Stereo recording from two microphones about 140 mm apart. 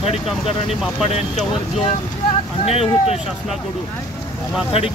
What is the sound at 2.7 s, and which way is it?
Speech, 45° left (ahead or behind).